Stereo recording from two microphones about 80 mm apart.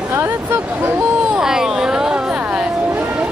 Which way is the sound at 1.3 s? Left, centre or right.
Centre.